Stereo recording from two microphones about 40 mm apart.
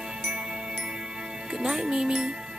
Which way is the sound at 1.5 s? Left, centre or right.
Centre.